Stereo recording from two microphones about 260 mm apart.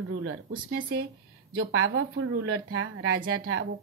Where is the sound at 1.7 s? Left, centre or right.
Right.